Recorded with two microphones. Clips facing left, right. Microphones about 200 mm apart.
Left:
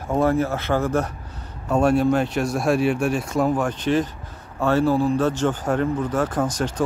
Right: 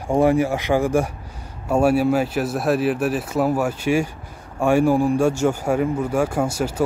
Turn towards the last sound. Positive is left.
turn(degrees=-10)  # may be behind; listen again after turning